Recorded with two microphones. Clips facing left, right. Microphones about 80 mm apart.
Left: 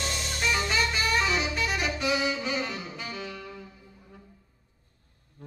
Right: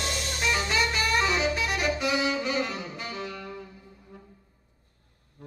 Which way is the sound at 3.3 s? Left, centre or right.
Centre.